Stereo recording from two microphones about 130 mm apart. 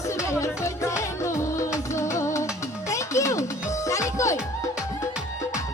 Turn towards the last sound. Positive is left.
turn(degrees=25)  # may be behind; listen again after turning